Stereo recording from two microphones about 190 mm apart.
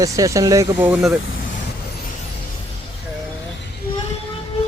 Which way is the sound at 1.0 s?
Centre (ahead or behind).